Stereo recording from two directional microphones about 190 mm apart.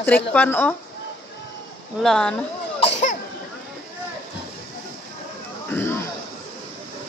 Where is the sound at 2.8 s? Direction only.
40° left (ahead or behind).